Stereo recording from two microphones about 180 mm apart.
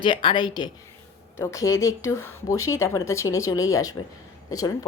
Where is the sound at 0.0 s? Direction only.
25° left (ahead or behind).